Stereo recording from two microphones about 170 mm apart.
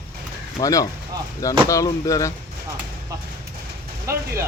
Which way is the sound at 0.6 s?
20° left (ahead or behind).